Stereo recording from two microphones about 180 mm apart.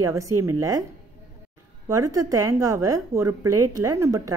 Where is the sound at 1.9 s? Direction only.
20° right (ahead or behind).